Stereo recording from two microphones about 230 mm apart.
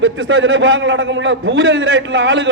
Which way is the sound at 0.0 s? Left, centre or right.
Right.